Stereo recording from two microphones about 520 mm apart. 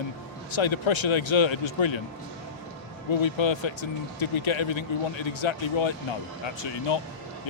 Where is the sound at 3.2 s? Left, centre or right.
Left.